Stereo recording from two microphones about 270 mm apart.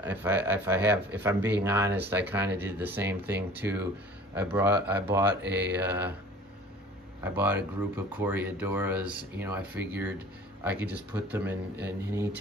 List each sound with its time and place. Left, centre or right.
0.0 s speech: centre
7.2 s speech: centre